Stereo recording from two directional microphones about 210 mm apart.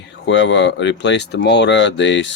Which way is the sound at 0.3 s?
60° left (ahead or behind).